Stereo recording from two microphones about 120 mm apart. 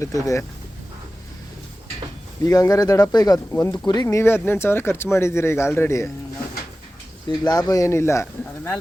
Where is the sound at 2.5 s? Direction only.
30° left (ahead or behind).